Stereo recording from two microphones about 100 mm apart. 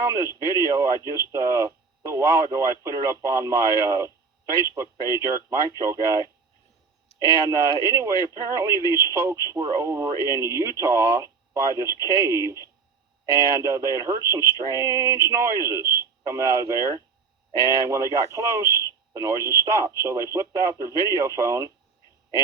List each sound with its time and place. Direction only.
0.0 s speech: 30° right (ahead or behind)
7.4 s speech: 35° right (ahead or behind)
18.8 s radio: 35° right (ahead or behind)
19.5 s speech: 30° right (ahead or behind)